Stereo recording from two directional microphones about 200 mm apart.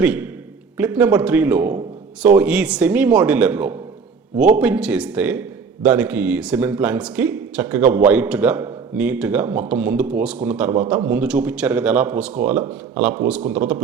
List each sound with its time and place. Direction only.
0.0 s a man's voice: 5° right (ahead or behind)